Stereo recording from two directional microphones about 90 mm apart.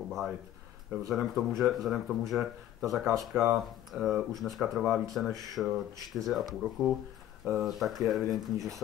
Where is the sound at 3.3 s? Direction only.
30° right (ahead or behind).